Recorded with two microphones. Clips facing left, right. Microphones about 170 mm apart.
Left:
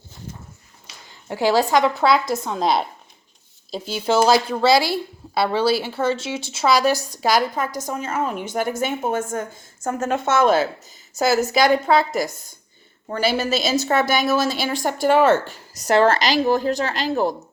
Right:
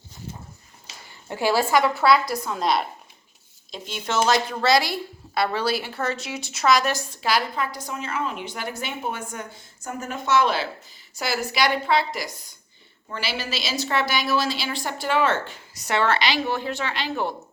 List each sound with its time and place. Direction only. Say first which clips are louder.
1.5 s a woman's voice: left 3 dB; 15° left (ahead or behind)
2.5 s a woman's voice: left 3 dB; centre (ahead or behind)
4.0 s a woman's voice: left 5 dB; 35° left (ahead or behind)